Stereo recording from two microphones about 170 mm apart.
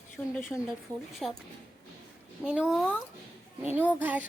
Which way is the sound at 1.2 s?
Centre (ahead or behind).